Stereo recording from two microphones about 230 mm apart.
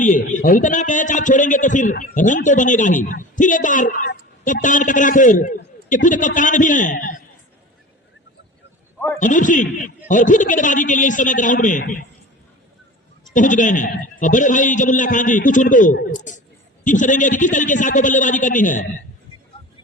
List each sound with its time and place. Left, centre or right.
0.0 s a man's voice: left
9.2 s a man's voice: left
13.3 s a man's voice: left